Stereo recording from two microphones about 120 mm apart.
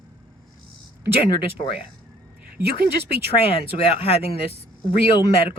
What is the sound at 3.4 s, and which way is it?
Speech, 55° left (ahead or behind).